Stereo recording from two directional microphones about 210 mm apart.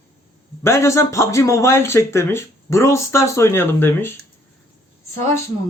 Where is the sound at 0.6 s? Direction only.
15° left (ahead or behind).